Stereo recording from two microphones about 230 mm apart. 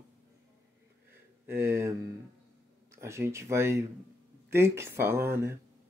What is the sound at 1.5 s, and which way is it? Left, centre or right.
Speech, centre.